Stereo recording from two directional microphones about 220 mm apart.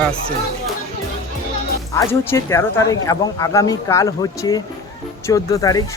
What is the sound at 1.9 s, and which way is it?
Speech, 15° left (ahead or behind).